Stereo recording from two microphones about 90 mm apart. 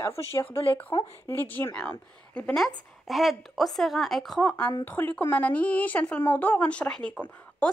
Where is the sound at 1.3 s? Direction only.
20° left (ahead or behind).